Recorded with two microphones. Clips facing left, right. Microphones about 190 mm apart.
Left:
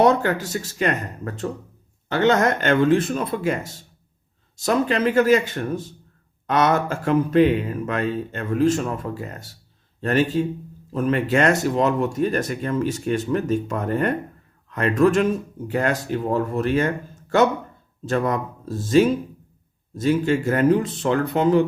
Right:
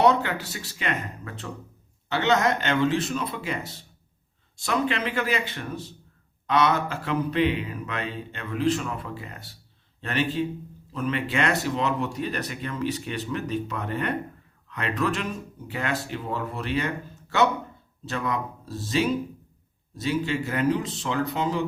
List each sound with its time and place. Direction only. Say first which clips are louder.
0.0 s speech: left 4 dB; 45° left (ahead or behind)